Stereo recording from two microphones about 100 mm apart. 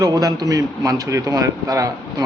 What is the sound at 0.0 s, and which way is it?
A man's voice, 35° right (ahead or behind).